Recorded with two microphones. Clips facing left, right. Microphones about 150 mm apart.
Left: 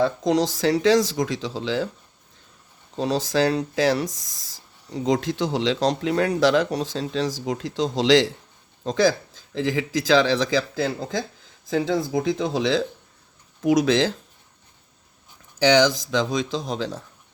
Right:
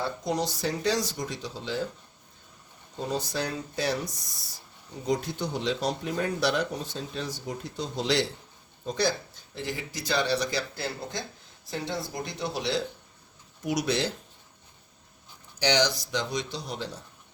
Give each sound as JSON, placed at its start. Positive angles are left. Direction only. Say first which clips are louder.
{"t": 0.0, "sound": "speech", "louder": "left 9 dB", "side_deg": 90}
{"t": 3.0, "sound": "speech", "louder": "left 9 dB", "side_deg": 90}
{"t": 12.4, "sound": "speech", "louder": "left 7 dB", "side_deg": 90}
{"t": 15.8, "sound": "speech", "louder": "left 7 dB", "side_deg": 90}